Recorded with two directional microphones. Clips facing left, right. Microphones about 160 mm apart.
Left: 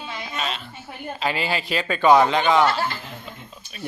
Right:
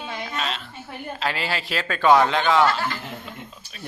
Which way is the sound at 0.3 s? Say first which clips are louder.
Left 1 dB; centre (ahead or behind).